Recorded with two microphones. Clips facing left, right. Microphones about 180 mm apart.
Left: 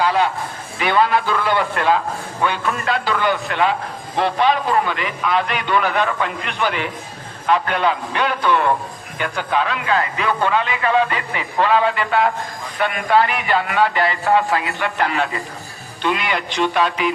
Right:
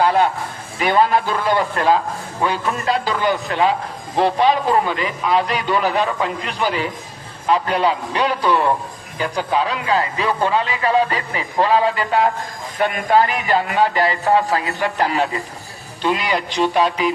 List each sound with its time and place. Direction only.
0.0 s a man's voice: 50° right (ahead or behind)